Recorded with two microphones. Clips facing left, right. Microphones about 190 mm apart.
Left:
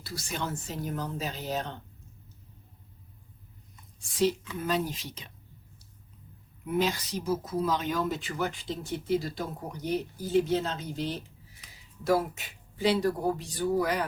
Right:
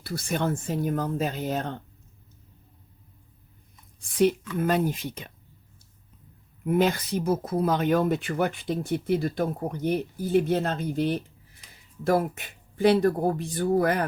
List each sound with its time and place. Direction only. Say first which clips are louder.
0.0 s speech: right 7 dB; 55° right (ahead or behind)
4.1 s speech: right 5 dB; 55° right (ahead or behind)
6.7 s speech: right 5 dB; 55° right (ahead or behind)